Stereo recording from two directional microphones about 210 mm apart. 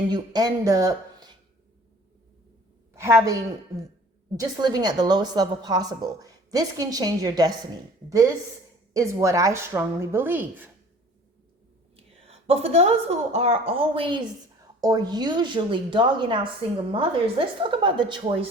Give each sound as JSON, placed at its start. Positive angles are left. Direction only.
{"t": 0.1, "sound": "speech", "side_deg": -20}
{"t": 2.9, "sound": "a woman's voice", "side_deg": -10}
{"t": 8.9, "sound": "a woman's voice", "side_deg": -15}
{"t": 11.9, "sound": "a woman's voice", "side_deg": -30}